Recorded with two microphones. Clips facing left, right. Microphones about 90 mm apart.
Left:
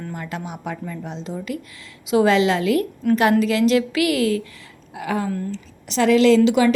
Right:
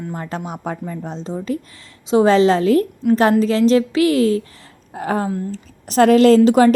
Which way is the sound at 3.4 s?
35° right (ahead or behind).